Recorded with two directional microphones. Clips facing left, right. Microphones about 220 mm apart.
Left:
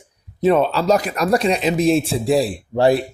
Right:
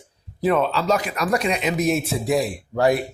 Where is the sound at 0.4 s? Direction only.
30° left (ahead or behind).